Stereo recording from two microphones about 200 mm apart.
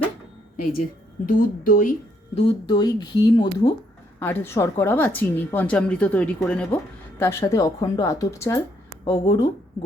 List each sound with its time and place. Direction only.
0.5 s speech: 45° left (ahead or behind)
2.3 s speech: 30° left (ahead or behind)
4.2 s a woman's voice: 10° left (ahead or behind)